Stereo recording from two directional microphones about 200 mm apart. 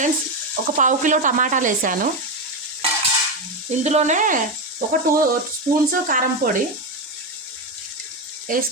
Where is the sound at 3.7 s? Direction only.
35° right (ahead or behind).